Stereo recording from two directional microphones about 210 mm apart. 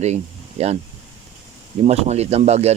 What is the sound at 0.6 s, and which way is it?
Speech, 30° right (ahead or behind).